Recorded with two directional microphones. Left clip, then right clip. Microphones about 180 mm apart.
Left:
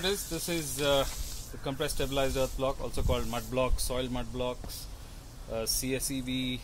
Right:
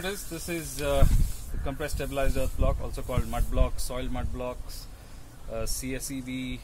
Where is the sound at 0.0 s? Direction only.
25° left (ahead or behind).